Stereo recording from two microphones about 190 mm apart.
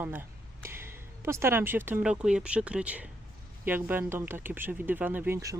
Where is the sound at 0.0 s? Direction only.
10° right (ahead or behind).